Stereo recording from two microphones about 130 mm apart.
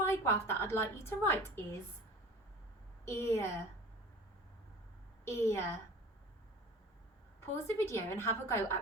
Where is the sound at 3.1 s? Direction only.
20° left (ahead or behind).